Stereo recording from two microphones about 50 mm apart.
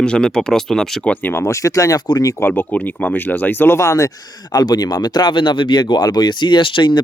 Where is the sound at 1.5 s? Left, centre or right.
Left.